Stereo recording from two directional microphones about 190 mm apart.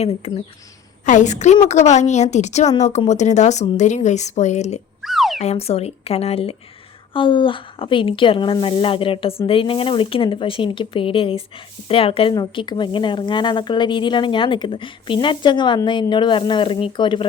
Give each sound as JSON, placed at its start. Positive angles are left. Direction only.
{"t": 0.0, "sound": "a woman's voice", "side_deg": 30}
{"t": 5.0, "sound": "a sound", "side_deg": 0}
{"t": 5.4, "sound": "a woman's voice", "side_deg": 35}